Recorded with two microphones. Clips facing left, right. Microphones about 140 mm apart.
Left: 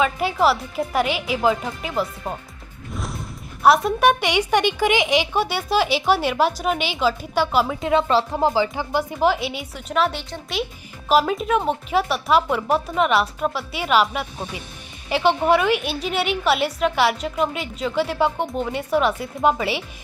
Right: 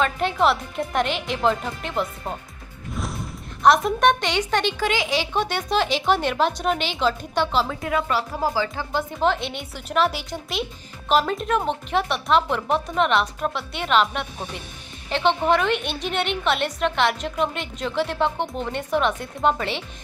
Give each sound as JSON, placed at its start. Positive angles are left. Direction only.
{"t": 0.0, "sound": "a woman's voice", "side_deg": 5}
{"t": 2.9, "sound": "music", "side_deg": 0}
{"t": 3.6, "sound": "a woman's voice", "side_deg": 5}
{"t": 7.8, "sound": "a woman's voice", "side_deg": 25}